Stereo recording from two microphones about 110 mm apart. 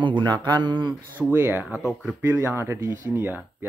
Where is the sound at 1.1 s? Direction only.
15° right (ahead or behind).